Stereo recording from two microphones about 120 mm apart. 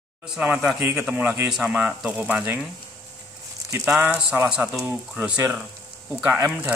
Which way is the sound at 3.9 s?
10° right (ahead or behind).